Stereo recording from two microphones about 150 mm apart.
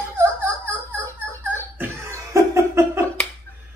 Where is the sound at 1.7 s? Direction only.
20° right (ahead or behind).